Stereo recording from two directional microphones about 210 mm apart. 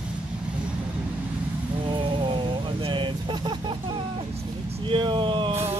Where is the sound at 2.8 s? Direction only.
20° right (ahead or behind).